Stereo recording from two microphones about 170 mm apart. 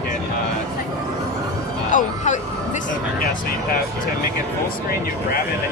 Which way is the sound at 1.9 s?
45° left (ahead or behind).